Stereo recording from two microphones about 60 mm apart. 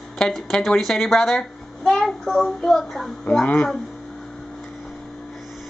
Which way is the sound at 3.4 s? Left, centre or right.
Left.